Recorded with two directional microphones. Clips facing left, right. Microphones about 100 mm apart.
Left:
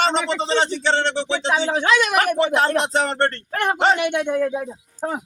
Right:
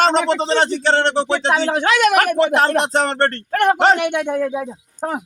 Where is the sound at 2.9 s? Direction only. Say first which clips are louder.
Right 3 dB; 45° right (ahead or behind); by 4.6 s 75° right (ahead or behind).